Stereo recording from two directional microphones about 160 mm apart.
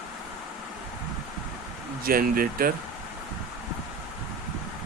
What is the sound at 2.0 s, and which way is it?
Speech, 65° right (ahead or behind).